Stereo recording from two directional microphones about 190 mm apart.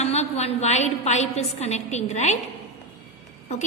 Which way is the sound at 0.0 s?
35° left (ahead or behind).